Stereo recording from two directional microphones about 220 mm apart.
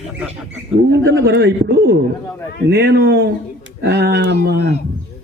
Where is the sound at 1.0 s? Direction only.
50° right (ahead or behind).